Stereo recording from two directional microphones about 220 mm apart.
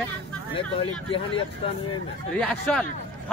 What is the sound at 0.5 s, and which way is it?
Speech, 25° left (ahead or behind).